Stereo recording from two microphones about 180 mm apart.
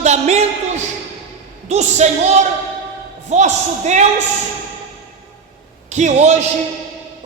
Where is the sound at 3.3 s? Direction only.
40° right (ahead or behind).